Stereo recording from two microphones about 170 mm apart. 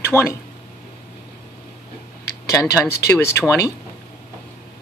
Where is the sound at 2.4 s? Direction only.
20° left (ahead or behind).